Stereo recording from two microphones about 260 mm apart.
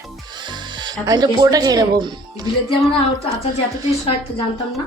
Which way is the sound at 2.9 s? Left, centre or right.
Left.